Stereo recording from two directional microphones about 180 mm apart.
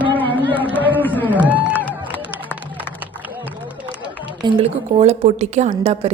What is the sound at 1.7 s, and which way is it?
Run, 10° left (ahead or behind).